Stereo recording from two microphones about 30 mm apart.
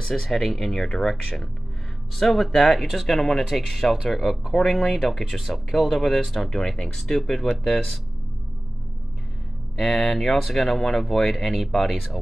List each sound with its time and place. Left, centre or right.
0.1 s speech: centre
3.1 s speech: centre
9.8 s speech: centre
10.0 s speech: left
10.4 s speech: centre